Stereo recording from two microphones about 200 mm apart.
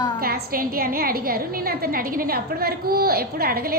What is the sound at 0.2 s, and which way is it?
A woman's voice, 50° right (ahead or behind).